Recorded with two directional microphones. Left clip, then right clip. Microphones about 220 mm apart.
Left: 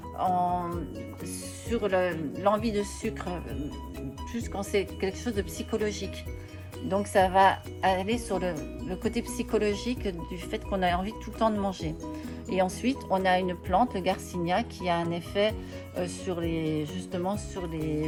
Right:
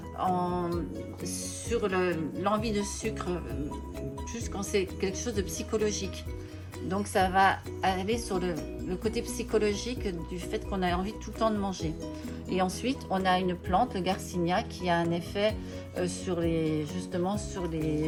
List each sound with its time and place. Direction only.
0.2 s music: 30° left (ahead or behind)
1.2 s speech: 30° left (ahead or behind)
4.4 s speech: 35° left (ahead or behind)